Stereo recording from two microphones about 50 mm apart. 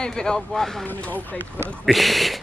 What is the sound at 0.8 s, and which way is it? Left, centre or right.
Speech, left.